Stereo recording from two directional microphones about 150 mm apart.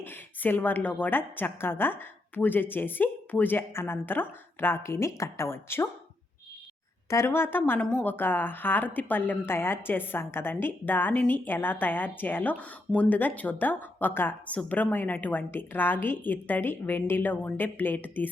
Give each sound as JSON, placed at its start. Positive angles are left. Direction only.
{"t": 0.0, "sound": "a woman's voice", "side_deg": 15}
{"t": 7.1, "sound": "a woman's voice", "side_deg": 15}